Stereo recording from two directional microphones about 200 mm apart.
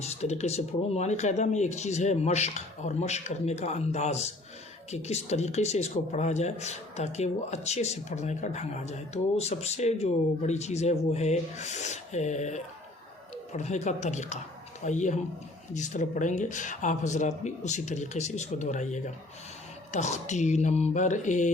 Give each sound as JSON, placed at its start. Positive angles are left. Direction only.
{"t": 0.0, "sound": "speech", "side_deg": 35}